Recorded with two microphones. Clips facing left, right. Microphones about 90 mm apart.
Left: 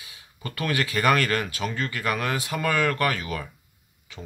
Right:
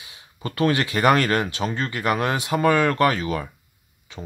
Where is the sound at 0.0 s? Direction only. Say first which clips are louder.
Right 5 dB; 25° right (ahead or behind).